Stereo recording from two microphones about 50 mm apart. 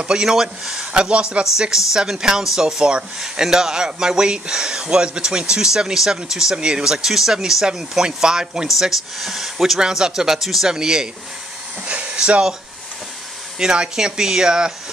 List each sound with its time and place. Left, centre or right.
0.0 s speech: centre
13.6 s speech: centre